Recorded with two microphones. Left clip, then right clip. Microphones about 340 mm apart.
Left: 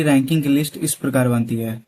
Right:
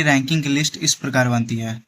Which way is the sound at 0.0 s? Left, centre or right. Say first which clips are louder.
Even; centre.